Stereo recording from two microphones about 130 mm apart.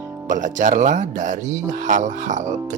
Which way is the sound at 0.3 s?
85° right.